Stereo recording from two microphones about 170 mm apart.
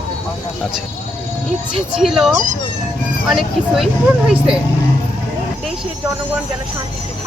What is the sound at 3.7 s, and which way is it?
Speech, 5° right (ahead or behind).